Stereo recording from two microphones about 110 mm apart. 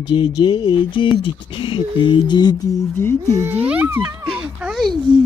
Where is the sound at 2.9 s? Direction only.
20° left (ahead or behind).